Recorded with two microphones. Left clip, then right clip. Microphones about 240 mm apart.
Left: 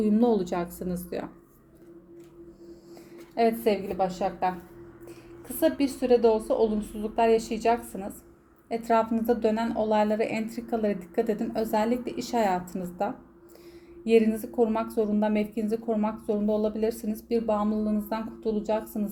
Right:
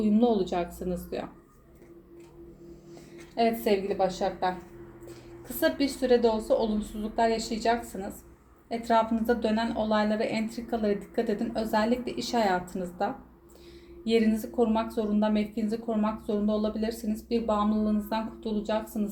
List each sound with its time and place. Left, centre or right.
0.0 s a woman's voice: left
3.3 s a woman's voice: left
5.5 s a woman's voice: left